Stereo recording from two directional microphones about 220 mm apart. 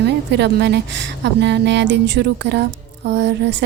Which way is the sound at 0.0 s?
50° right (ahead or behind).